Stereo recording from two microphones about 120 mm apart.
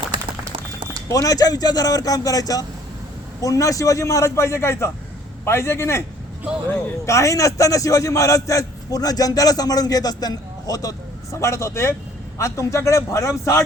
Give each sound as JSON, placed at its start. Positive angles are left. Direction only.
{"t": 1.1, "sound": "a man's voice", "side_deg": 30}
{"t": 7.0, "sound": "a man's voice", "side_deg": 25}